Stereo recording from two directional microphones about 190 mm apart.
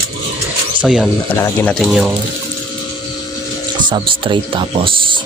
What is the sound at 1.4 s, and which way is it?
Speech, 10° left (ahead or behind).